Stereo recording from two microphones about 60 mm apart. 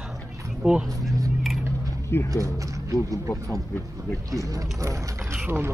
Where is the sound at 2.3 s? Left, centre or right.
Right.